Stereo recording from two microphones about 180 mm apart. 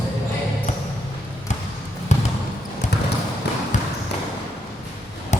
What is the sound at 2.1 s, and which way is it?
Trickle, 40° left (ahead or behind).